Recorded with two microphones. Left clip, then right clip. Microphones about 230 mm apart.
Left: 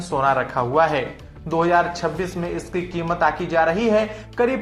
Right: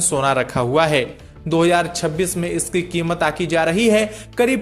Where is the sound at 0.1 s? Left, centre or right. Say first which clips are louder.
Even; right.